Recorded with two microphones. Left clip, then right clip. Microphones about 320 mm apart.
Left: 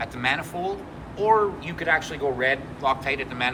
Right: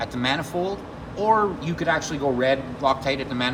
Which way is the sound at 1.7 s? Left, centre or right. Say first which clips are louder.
Even; centre.